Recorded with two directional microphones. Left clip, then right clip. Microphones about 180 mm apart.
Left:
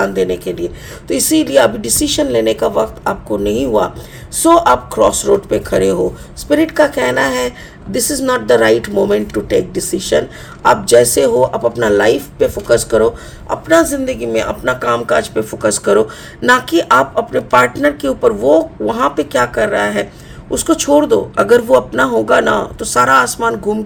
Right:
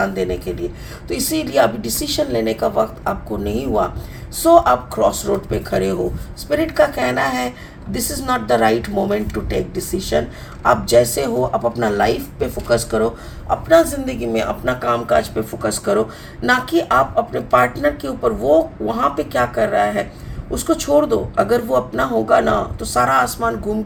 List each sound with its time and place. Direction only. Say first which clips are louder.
0.0 s speech: left 5 dB; 50° left (ahead or behind)
13.5 s speech: left 2 dB; 40° left (ahead or behind)